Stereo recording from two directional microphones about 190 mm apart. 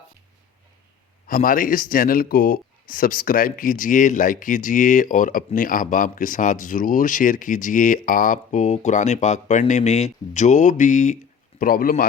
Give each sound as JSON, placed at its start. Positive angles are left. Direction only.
{"t": 1.3, "sound": "speech", "side_deg": 45}